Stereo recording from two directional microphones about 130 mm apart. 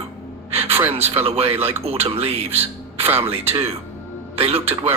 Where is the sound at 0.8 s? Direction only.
50° right (ahead or behind).